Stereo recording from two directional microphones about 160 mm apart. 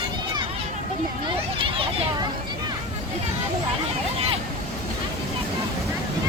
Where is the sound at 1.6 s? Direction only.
35° right (ahead or behind).